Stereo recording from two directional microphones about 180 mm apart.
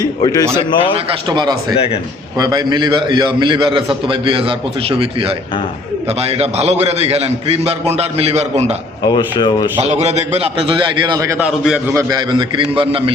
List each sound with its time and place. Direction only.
0.0 s a man's voice: 20° left (ahead or behind)
1.3 s a man's voice: 25° right (ahead or behind)
9.0 s speech: 25° left (ahead or behind)
9.9 s a man's voice: 40° right (ahead or behind)